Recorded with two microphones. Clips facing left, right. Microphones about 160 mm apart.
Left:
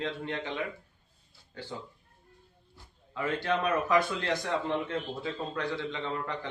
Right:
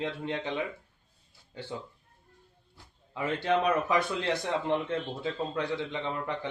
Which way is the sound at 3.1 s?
20° right (ahead or behind).